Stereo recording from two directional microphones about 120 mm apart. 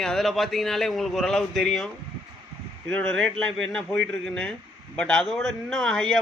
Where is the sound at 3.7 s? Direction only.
10° left (ahead or behind).